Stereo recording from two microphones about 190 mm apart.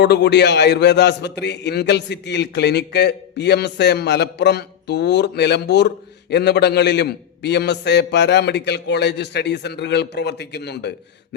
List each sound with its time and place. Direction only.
0.0 s a man's voice: 65° left (ahead or behind)